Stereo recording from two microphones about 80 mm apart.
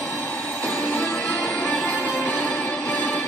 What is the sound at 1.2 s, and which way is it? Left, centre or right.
Music, centre.